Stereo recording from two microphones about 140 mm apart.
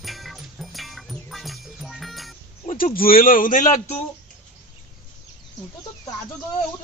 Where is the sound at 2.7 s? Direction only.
80° left; by 3.8 s 60° left (ahead or behind).